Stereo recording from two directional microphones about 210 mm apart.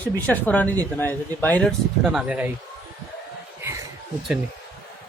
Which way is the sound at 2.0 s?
5° right (ahead or behind).